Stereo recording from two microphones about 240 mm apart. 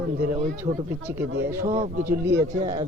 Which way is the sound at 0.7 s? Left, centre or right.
Right.